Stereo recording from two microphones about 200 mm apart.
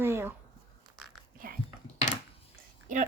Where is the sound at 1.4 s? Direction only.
45° right (ahead or behind).